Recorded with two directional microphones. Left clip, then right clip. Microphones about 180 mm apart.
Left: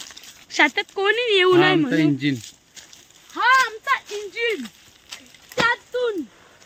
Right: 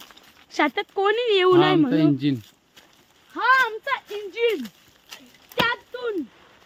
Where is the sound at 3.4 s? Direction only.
55° right (ahead or behind).